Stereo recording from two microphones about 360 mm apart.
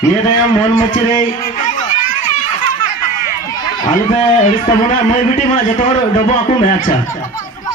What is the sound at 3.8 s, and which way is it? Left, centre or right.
A man's voice, centre.